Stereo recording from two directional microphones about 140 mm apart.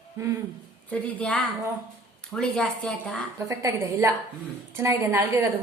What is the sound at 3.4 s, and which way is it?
A woman's voice, 20° right (ahead or behind).